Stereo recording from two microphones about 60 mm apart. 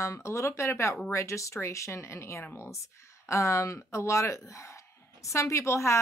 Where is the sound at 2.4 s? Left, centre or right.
Left.